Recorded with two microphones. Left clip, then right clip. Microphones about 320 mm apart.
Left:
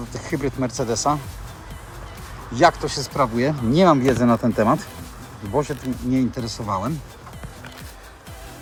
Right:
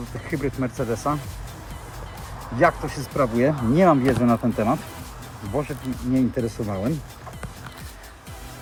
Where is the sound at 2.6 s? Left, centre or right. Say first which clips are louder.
Left 3 dB; centre.